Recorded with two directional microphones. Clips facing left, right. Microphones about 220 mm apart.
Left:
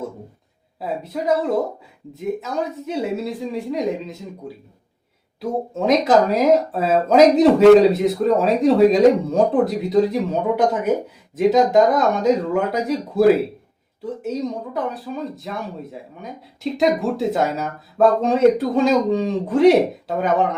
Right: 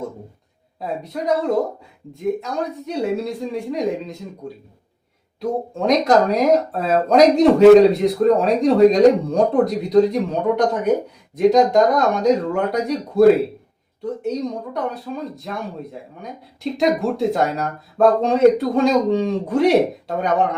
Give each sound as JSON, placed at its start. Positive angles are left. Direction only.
{"t": 0.8, "sound": "speech", "side_deg": 5}